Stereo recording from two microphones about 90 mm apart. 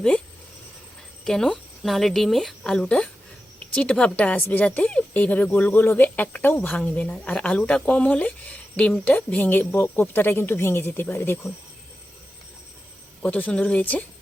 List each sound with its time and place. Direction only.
1.2 s speech: 5° left (ahead or behind); by 11.5 s 25° left (ahead or behind)
13.2 s speech: 15° left (ahead or behind)